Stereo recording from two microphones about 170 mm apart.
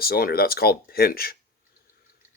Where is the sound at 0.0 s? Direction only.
60° left (ahead or behind).